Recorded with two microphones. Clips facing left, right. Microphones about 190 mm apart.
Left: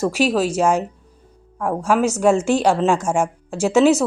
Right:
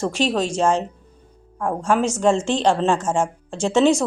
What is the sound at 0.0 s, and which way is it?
A woman's voice, 5° left (ahead or behind).